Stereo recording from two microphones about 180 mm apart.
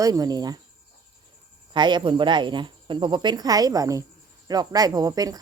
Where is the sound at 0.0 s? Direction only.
20° right (ahead or behind).